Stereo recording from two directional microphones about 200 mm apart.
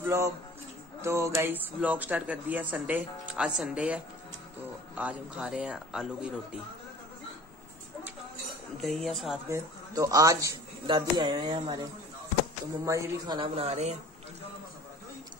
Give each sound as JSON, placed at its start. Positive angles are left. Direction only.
{"t": 0.0, "sound": "a sound", "side_deg": -10}
{"t": 1.0, "sound": "a man's voice", "side_deg": -15}
{"t": 8.8, "sound": "a man's voice", "side_deg": 0}
{"t": 9.5, "sound": "speech", "side_deg": -15}
{"t": 13.4, "sound": "speech", "side_deg": -30}